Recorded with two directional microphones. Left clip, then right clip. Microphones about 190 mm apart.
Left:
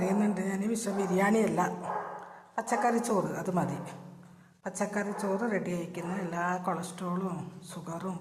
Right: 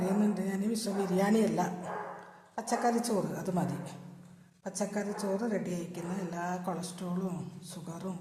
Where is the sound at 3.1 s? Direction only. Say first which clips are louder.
Left 3 dB; 15° left (ahead or behind).